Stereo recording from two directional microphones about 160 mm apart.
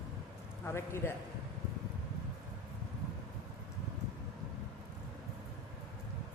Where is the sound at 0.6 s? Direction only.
15° left (ahead or behind).